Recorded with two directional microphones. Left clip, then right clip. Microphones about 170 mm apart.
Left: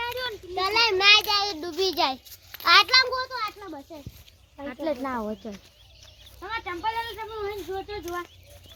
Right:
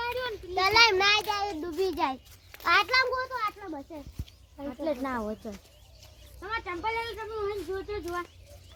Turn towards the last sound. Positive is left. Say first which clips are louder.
# left 1 dB
turn(degrees=40)  # may be behind; listen again after turning